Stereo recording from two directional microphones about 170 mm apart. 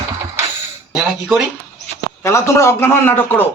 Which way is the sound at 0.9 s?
5° right (ahead or behind).